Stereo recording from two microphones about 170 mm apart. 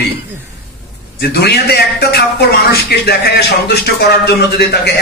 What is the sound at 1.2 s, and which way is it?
A man's voice, 70° left (ahead or behind).